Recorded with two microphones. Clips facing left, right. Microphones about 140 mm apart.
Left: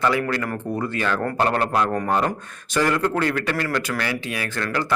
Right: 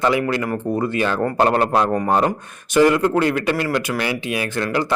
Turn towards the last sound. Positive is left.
turn(degrees=-20)  # may be behind; listen again after turning